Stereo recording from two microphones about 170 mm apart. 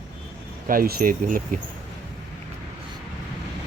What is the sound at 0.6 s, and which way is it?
Speech, 55° right (ahead or behind).